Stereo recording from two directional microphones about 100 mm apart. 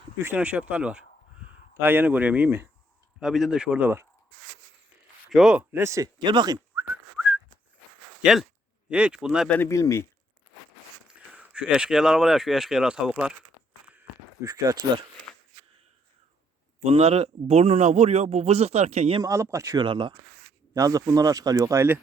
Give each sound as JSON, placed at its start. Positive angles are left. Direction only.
{"t": 0.3, "sound": "speech", "side_deg": -15}
{"t": 3.2, "sound": "speech", "side_deg": -5}
{"t": 3.8, "sound": "speech", "side_deg": -20}
{"t": 5.3, "sound": "speech", "side_deg": -5}
{"t": 5.7, "sound": "speech", "side_deg": -30}
{"t": 6.1, "sound": "speech", "side_deg": -50}
{"t": 8.2, "sound": "speech", "side_deg": -5}
{"t": 9.6, "sound": "speech", "side_deg": 30}
{"t": 11.3, "sound": "speech", "side_deg": -10}
{"t": 14.4, "sound": "speech", "side_deg": -35}
{"t": 16.8, "sound": "speech", "side_deg": -85}
{"t": 19.2, "sound": "speech", "side_deg": -30}
{"t": 19.8, "sound": "speech", "side_deg": -55}
{"t": 20.7, "sound": "speech", "side_deg": -35}